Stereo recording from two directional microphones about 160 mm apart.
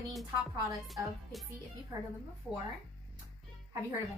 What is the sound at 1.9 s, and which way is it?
Speech, 20° right (ahead or behind).